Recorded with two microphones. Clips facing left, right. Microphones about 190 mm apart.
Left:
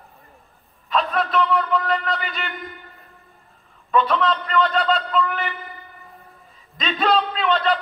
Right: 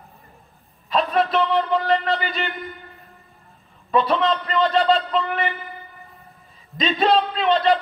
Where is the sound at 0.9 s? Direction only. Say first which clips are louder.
Right 2 dB; 35° right (ahead or behind).